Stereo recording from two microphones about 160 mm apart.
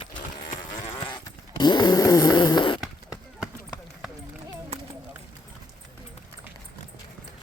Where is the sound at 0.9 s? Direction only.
30° left (ahead or behind).